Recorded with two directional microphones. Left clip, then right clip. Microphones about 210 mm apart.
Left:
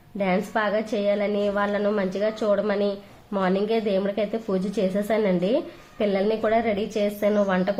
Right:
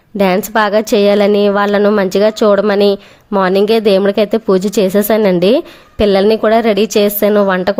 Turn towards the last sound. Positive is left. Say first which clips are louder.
# right 11 dB
turn(degrees=-45)  # may be behind; listen again after turning